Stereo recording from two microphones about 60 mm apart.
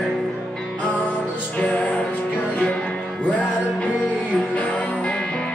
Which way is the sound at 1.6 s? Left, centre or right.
Left.